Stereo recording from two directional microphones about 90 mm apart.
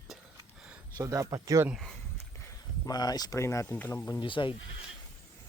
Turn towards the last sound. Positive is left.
turn(degrees=65)  # may be behind; listen again after turning